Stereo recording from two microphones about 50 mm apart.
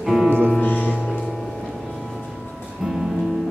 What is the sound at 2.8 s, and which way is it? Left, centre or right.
Music, centre.